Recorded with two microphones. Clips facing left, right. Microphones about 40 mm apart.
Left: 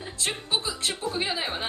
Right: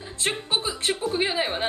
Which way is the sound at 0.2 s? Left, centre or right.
Right.